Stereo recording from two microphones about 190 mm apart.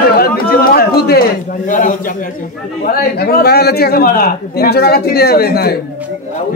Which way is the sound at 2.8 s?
55° left (ahead or behind).